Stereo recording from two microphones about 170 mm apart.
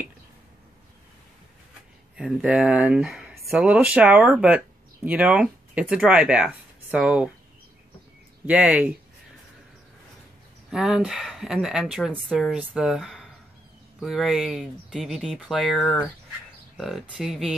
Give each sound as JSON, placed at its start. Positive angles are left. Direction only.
{"t": 2.1, "sound": "speech", "side_deg": -5}
{"t": 8.5, "sound": "speech", "side_deg": -5}
{"t": 10.7, "sound": "speech", "side_deg": -5}